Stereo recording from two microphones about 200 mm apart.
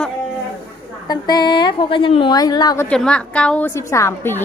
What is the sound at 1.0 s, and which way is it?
A woman's voice, 20° left (ahead or behind).